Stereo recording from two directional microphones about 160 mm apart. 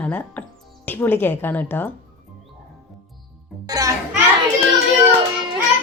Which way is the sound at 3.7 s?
20° right (ahead or behind).